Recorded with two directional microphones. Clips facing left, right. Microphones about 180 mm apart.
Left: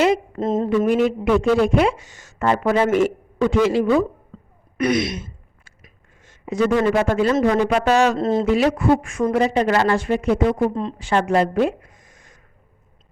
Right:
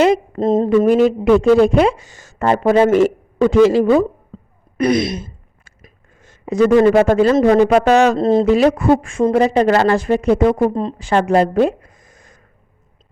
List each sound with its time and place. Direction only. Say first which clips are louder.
0.0 s speech: right 4 dB; 35° right (ahead or behind)
5.8 s a sound: right 5 dB; 40° right (ahead or behind)
7.1 s speech: right 6 dB; 35° right (ahead or behind)
9.0 s speech: right 5 dB; 30° right (ahead or behind)